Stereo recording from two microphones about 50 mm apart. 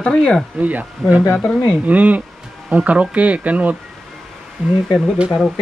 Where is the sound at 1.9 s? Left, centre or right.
Right.